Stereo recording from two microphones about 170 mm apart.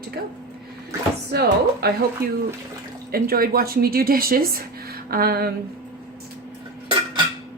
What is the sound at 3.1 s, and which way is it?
Speech, 60° right (ahead or behind).